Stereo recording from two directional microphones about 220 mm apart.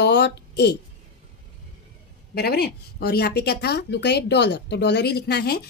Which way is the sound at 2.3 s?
45° left (ahead or behind).